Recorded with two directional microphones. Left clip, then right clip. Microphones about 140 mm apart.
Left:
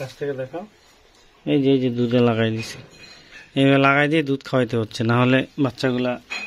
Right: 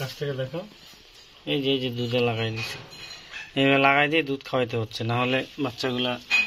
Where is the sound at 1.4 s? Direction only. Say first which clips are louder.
Left 6 dB; 90° left.